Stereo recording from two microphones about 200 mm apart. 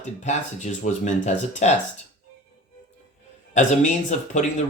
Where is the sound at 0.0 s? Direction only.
35° left (ahead or behind).